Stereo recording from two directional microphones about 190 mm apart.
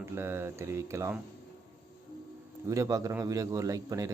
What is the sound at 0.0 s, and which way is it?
Speech, 15° right (ahead or behind).